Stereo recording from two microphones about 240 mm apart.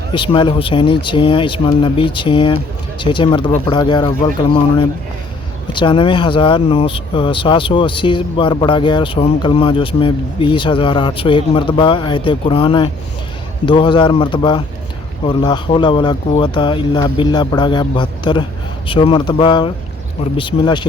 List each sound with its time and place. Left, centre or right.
0.1 s speech: left